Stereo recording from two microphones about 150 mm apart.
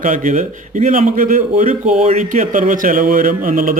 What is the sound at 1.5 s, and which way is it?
Speech, 50° right (ahead or behind).